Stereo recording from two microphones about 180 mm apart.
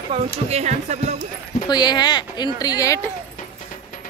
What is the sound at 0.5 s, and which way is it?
Speech, 40° right (ahead or behind).